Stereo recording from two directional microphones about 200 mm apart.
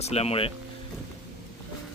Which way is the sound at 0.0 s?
30° left (ahead or behind).